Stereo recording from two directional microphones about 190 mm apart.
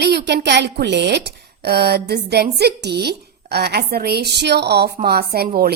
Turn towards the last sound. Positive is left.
turn(degrees=-50)  # may be behind; listen again after turning